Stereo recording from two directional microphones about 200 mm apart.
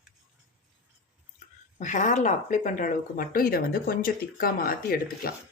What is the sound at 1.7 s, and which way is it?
Speech, 40° left (ahead or behind).